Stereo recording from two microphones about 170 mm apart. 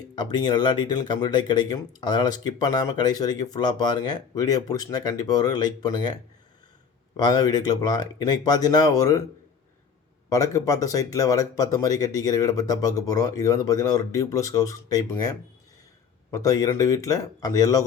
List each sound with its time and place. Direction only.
0.2 s speech: 25° left (ahead or behind)
7.2 s speech: 25° left (ahead or behind)
10.2 s speech: 20° left (ahead or behind)